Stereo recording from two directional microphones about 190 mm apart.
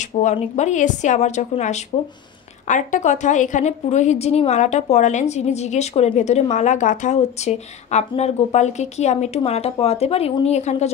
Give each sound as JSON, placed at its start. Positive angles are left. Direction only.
{"t": 0.2, "sound": "speech", "side_deg": 40}